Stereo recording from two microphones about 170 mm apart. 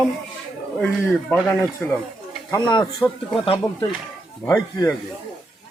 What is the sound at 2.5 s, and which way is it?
Speech, 25° left (ahead or behind).